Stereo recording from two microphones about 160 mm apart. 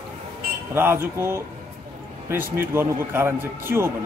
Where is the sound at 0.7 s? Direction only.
15° right (ahead or behind).